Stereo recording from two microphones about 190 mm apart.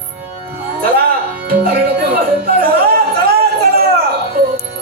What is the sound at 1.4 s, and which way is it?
Music, 55° right (ahead or behind).